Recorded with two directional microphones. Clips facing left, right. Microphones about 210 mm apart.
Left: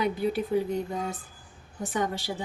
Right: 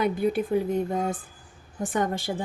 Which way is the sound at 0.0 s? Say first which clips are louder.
Right 3 dB; 50° right (ahead or behind).